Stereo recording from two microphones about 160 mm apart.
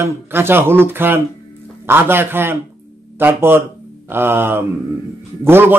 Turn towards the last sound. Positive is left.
turn(degrees=-15)  # may be behind; listen again after turning